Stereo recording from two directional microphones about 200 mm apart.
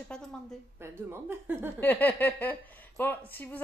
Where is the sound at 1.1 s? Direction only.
10° right (ahead or behind).